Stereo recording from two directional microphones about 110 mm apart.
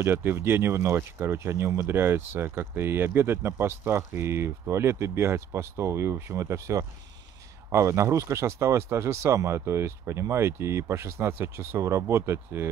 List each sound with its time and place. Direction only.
0.0 s speech: 20° right (ahead or behind)